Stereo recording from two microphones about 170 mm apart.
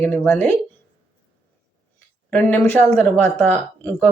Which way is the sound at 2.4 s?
10° left (ahead or behind).